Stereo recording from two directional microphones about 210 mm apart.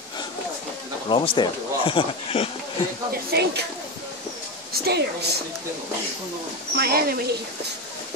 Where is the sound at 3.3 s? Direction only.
50° right (ahead or behind).